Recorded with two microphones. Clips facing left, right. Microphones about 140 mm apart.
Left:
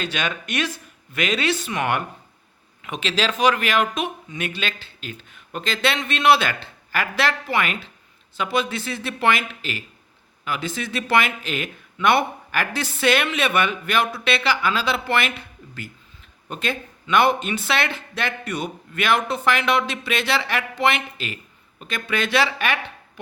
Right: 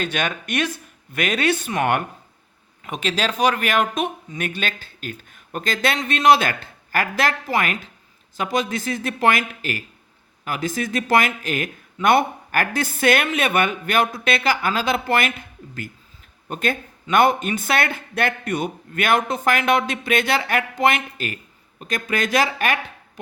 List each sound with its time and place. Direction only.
0.0 s speech: 50° right (ahead or behind)